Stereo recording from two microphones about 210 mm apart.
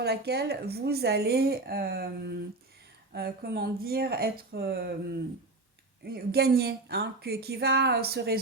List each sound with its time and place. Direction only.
0.0 s speech: 50° right (ahead or behind)
6.1 s speech: 50° right (ahead or behind)